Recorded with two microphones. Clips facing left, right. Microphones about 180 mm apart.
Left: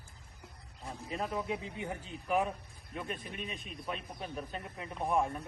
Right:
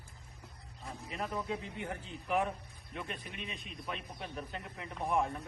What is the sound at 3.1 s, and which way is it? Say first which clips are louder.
Speech: left 3 dB; 35° left (ahead or behind).